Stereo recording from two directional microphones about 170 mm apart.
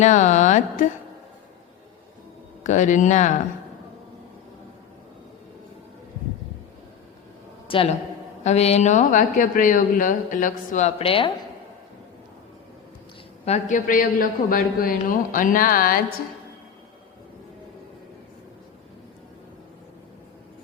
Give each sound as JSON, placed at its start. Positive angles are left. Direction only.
{"t": 0.0, "sound": "speech", "side_deg": 45}
{"t": 2.6, "sound": "speech", "side_deg": 45}
{"t": 7.7, "sound": "a man's voice", "side_deg": 30}
{"t": 13.4, "sound": "speech", "side_deg": 45}